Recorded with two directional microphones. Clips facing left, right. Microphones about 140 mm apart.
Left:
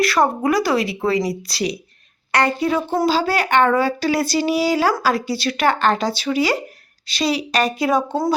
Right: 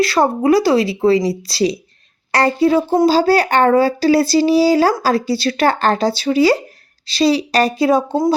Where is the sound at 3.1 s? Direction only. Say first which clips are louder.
Right 5 dB; 35° right (ahead or behind).